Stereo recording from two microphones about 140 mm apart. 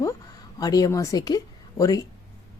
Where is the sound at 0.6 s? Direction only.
25° left (ahead or behind).